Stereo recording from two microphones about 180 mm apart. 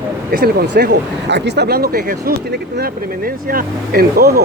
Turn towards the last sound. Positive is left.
turn(degrees=-60)  # may be behind; listen again after turning